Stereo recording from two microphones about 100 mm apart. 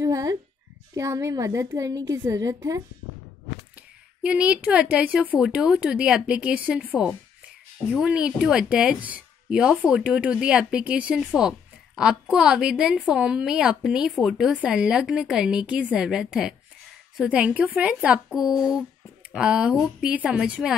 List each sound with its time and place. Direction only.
0.0 s a child's voice: 35° right (ahead or behind)
3.7 s speech: 10° right (ahead or behind)
8.0 s speech: 10° right (ahead or behind)